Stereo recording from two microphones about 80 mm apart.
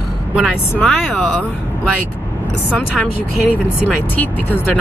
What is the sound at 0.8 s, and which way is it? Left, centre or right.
Speech, centre.